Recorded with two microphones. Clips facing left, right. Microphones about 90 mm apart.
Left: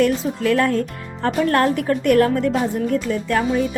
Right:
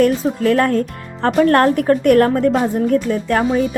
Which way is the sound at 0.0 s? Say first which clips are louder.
Right 4 dB; 45° right (ahead or behind).